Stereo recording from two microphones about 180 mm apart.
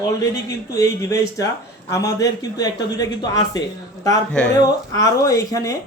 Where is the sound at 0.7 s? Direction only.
20° left (ahead or behind).